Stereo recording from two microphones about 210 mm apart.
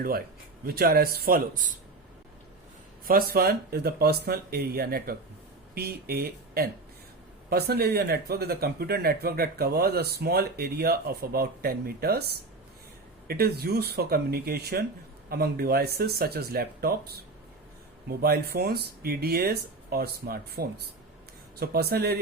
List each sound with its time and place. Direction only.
0.6 s speech: 45° right (ahead or behind)
3.1 s speech: 45° right (ahead or behind)